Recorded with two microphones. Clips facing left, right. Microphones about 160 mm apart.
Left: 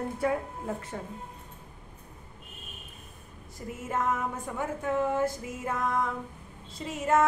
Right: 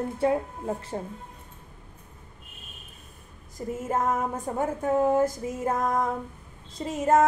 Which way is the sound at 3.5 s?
40° right (ahead or behind).